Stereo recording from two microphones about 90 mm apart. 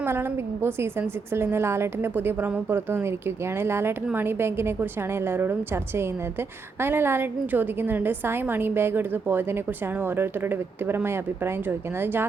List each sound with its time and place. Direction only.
0.0 s a woman's voice: 25° right (ahead or behind)